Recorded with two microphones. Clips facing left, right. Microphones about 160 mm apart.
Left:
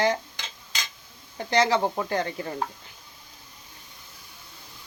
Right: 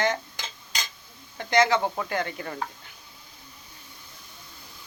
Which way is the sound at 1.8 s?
20° left (ahead or behind).